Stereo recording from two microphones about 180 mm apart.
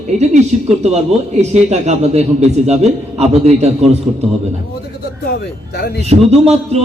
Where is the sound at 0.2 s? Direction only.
35° right (ahead or behind).